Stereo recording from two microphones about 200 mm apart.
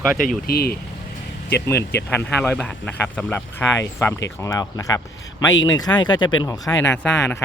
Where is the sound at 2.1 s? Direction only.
10° left (ahead or behind).